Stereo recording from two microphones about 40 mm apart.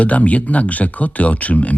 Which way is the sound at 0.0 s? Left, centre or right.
Left.